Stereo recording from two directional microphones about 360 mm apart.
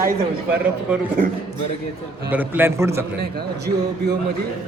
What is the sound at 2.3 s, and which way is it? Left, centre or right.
Speech, centre.